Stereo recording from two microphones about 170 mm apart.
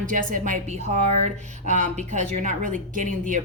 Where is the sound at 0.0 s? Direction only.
50° right (ahead or behind).